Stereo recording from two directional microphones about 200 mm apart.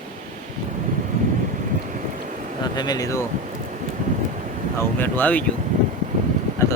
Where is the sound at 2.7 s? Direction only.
20° left (ahead or behind).